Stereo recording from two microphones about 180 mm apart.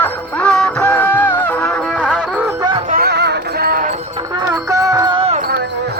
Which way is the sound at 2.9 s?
60° right (ahead or behind).